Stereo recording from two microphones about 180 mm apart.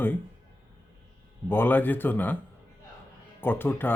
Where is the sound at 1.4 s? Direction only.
10° left (ahead or behind).